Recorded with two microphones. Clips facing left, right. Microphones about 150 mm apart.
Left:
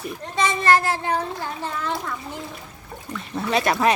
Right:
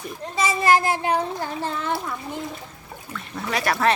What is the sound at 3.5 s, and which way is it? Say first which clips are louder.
Speech: left 2 dB; 20° left (ahead or behind).